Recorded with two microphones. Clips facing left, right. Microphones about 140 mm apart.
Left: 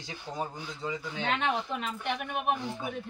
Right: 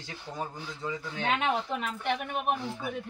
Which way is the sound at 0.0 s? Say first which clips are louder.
Left 1 dB; 15° left (ahead or behind).